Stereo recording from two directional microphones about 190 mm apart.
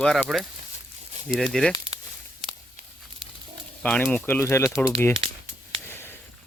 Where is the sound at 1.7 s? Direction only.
35° right (ahead or behind).